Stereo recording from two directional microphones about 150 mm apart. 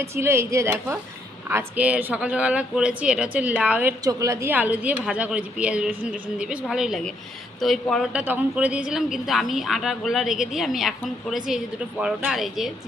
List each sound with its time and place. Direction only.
0.0 s speech: 15° right (ahead or behind)
4.0 s speech: 20° right (ahead or behind); by 8.1 s centre (ahead or behind)
8.1 s speech: 10° right (ahead or behind)